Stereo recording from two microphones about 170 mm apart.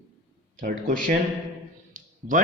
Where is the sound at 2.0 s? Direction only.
50° right (ahead or behind).